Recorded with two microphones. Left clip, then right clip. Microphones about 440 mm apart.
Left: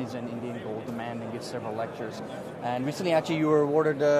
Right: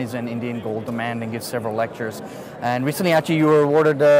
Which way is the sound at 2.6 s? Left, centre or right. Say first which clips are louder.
Right 9 dB; right.